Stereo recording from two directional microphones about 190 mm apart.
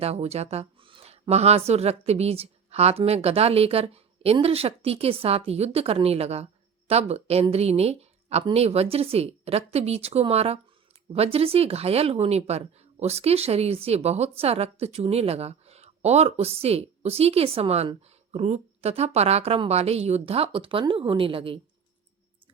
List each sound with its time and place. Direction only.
0.0 s speech: 35° right (ahead or behind)